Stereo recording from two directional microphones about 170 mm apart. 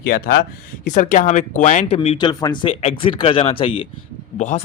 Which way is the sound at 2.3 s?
25° left (ahead or behind).